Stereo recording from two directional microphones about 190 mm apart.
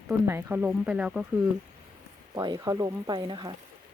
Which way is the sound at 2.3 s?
20° right (ahead or behind).